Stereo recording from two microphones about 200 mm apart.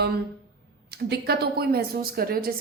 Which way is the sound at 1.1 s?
50° right (ahead or behind).